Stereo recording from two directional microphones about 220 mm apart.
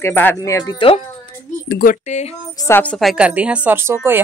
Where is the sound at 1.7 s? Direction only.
40° left (ahead or behind).